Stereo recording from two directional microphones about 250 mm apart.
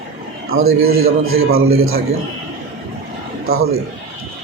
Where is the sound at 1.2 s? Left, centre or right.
Right.